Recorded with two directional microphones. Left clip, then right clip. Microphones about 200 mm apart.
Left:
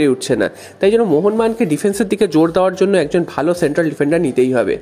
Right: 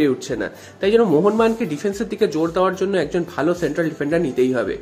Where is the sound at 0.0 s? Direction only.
40° left (ahead or behind).